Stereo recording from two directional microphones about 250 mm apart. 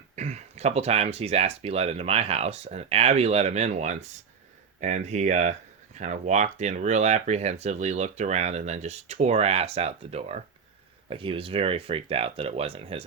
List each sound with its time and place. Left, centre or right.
0.2 s speech: right